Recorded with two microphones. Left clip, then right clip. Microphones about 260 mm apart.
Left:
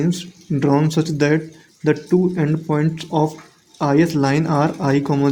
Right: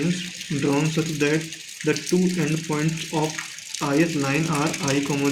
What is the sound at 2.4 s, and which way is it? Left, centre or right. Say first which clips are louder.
Speech: left 5 dB; left.